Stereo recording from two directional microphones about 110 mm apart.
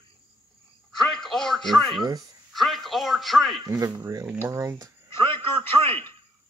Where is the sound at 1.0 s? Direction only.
5° left (ahead or behind).